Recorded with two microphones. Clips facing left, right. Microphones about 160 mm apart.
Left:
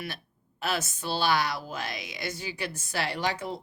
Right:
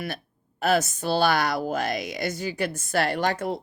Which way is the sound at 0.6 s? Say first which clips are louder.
Right 8 dB; 45° right (ahead or behind).